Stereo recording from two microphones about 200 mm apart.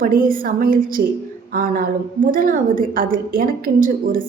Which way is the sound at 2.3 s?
45° right (ahead or behind).